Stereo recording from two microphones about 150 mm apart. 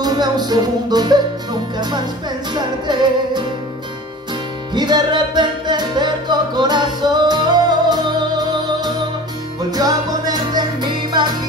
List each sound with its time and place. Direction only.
0.0 s music: 25° right (ahead or behind)
4.7 s music: 30° right (ahead or behind)